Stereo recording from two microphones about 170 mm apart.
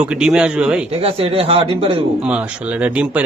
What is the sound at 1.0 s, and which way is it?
Speech, 35° right (ahead or behind).